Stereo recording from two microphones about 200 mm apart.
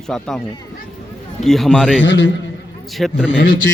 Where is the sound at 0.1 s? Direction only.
5° left (ahead or behind).